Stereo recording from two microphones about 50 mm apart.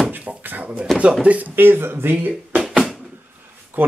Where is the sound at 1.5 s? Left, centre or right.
Right.